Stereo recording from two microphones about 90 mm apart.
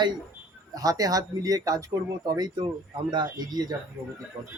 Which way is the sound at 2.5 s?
60° right (ahead or behind).